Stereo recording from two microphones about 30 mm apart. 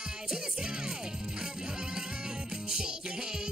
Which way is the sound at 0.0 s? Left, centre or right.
Right.